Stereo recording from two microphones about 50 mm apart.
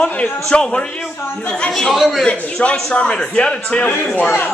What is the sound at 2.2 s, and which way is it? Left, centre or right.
A man's voice, left.